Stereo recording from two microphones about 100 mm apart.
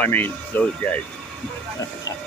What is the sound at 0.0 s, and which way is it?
Speech, 20° left (ahead or behind).